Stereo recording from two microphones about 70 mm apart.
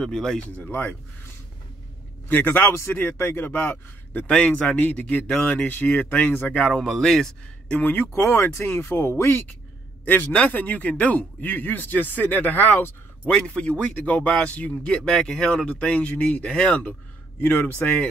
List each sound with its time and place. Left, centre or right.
0.0 s speech: centre
0.6 s a man's voice: left
2.7 s a man's voice: left; by 6.6 s centre
6.6 s speech: centre
7.7 s a man's voice: left
8.1 s a man's voice: left
13.3 s speech: centre
15.0 s speech: centre
17.4 s a man's voice: left